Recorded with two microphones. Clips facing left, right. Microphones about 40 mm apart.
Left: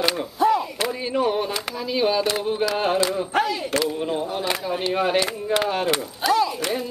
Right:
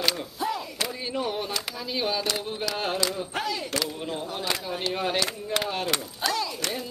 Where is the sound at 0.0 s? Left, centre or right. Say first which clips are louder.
Left 8 dB; left.